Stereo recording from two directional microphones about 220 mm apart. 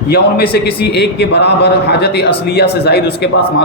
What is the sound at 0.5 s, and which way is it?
Speech, 50° left (ahead or behind).